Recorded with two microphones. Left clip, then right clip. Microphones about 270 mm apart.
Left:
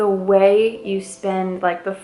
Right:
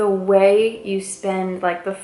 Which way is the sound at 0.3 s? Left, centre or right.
Centre.